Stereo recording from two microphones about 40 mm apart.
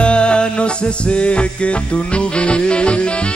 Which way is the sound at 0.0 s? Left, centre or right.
Left.